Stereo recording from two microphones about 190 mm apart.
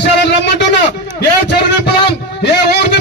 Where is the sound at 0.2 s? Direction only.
65° left (ahead or behind).